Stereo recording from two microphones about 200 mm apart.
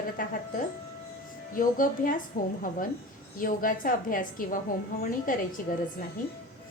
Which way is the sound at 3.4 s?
45° left (ahead or behind).